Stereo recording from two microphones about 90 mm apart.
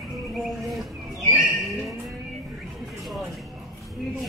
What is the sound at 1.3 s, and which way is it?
Music, centre (ahead or behind).